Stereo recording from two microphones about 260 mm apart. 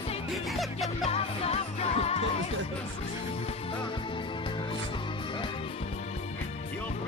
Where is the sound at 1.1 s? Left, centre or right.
Left.